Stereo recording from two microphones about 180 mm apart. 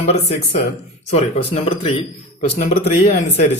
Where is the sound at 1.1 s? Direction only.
35° left (ahead or behind).